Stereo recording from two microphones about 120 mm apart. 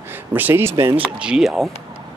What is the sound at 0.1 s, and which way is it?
Speech, 15° right (ahead or behind).